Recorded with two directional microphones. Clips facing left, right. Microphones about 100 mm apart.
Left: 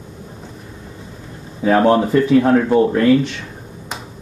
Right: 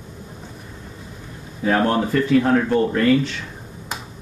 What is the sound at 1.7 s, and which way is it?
Speech, 20° left (ahead or behind).